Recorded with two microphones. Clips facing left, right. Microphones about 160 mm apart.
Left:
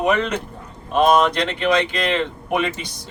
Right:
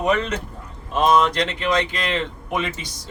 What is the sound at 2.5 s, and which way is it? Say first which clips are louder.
Speech: left 4 dB; 60° left (ahead or behind).